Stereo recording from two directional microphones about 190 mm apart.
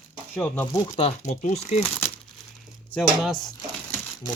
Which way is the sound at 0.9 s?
35° left (ahead or behind).